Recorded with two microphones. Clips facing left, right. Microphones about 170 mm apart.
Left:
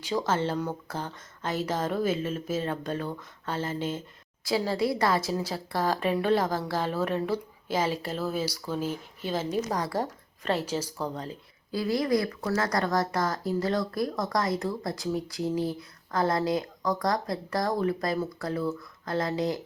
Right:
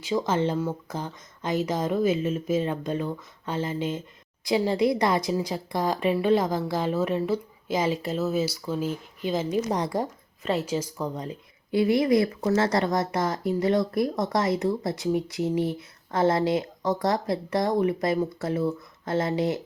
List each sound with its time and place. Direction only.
0.3 s a woman's voice: 10° right (ahead or behind)
10.8 s speech: 10° left (ahead or behind)
11.7 s speech: 20° right (ahead or behind)